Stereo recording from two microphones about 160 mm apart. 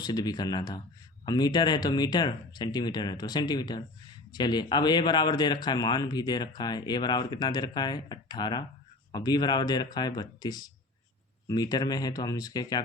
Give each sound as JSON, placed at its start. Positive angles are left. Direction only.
{"t": 0.0, "sound": "speech", "side_deg": 25}